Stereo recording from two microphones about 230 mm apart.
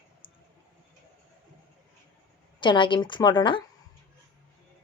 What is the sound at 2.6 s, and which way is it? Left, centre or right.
A woman's voice, left.